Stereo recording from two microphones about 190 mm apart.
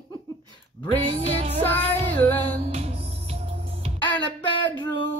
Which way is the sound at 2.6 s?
30° right (ahead or behind).